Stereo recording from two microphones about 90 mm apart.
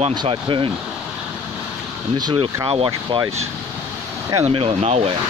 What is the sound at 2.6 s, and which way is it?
Speech, 80° right.